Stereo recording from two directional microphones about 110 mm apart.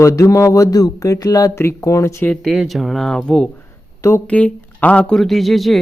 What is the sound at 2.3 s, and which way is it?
A woman's voice, 5° left (ahead or behind).